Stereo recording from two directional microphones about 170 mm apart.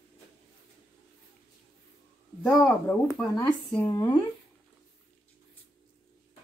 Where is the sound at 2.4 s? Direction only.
10° left (ahead or behind).